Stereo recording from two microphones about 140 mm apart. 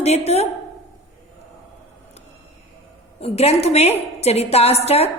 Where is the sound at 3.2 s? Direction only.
45° left (ahead or behind).